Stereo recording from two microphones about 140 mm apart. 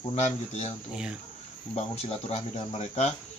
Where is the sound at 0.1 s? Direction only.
55° left (ahead or behind).